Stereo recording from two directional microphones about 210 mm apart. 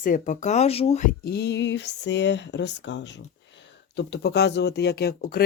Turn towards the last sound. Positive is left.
turn(degrees=45)  # may be behind; listen again after turning